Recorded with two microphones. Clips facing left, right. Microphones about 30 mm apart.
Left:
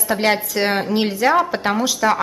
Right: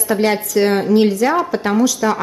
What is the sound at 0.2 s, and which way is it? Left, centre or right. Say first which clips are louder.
A woman's voice: right 3 dB; left.